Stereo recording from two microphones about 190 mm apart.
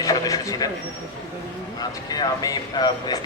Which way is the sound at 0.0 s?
20° left (ahead or behind).